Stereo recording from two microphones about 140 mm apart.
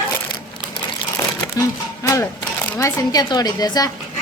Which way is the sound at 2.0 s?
20° left (ahead or behind).